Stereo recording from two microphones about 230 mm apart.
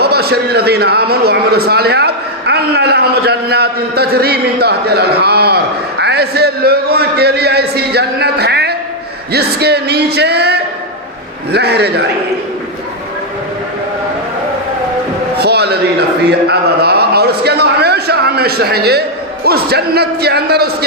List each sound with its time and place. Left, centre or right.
0.0 s a man's voice: right
15.4 s a man's voice: right